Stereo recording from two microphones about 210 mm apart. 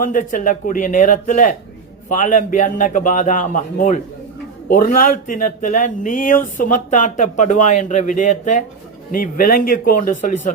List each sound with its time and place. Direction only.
0.0 s speech: 40° left (ahead or behind)